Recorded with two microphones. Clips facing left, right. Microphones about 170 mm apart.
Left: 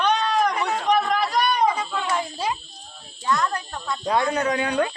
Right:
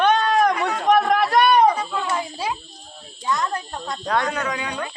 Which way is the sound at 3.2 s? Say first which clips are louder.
Even; 20° right (ahead or behind).